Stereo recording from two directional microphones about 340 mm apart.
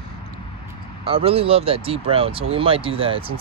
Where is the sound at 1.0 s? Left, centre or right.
Centre.